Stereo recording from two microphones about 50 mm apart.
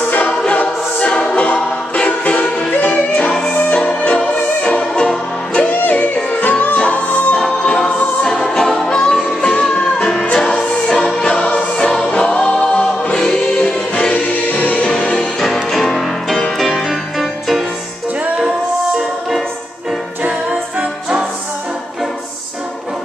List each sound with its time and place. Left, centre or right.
0.3 s music: left
1.0 s a capella: left
2.8 s music: left
3.3 s music: centre
5.7 s music: left
7.3 s music: centre
14.1 s choir: left
14.9 s music: centre
15.4 s music: centre